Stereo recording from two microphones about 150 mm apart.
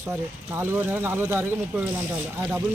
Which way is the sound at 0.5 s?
15° right (ahead or behind).